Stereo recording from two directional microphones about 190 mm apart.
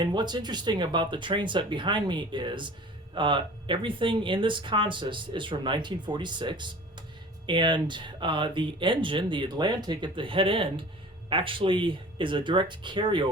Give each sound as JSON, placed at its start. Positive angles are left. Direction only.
{"t": 0.0, "sound": "speech", "side_deg": -25}